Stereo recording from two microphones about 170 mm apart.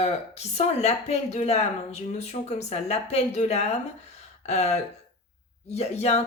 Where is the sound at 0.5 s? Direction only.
40° left (ahead or behind).